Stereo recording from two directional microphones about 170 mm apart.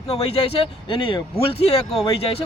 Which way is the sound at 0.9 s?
30° left (ahead or behind).